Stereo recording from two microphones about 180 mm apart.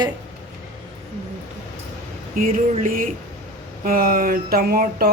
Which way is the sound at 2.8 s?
50° right (ahead or behind).